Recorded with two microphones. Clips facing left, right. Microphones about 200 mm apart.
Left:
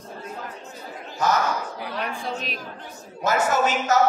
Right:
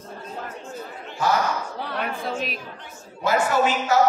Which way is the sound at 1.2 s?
40° left (ahead or behind).